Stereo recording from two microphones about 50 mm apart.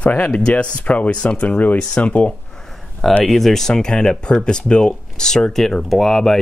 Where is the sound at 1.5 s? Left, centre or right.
Left.